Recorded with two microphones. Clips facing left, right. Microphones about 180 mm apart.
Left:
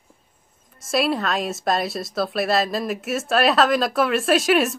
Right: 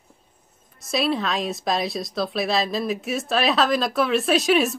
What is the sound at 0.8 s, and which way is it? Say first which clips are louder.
A woman's voice: left 2 dB; 5° left (ahead or behind).